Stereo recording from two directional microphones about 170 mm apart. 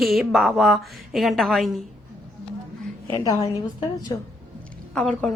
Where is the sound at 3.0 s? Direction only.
20° left (ahead or behind).